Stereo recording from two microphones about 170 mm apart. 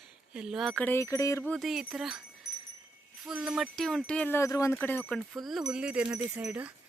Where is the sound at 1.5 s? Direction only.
Centre (ahead or behind).